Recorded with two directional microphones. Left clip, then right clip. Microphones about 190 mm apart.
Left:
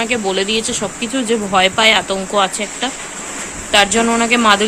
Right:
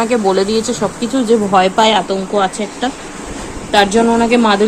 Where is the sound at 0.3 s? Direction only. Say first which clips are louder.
Right 3 dB; 25° left (ahead or behind).